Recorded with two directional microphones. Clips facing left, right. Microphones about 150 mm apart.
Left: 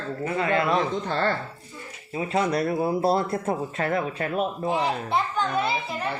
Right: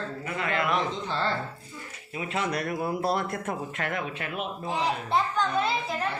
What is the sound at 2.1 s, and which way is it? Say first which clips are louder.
Speech: left 6 dB; 30° left (ahead or behind).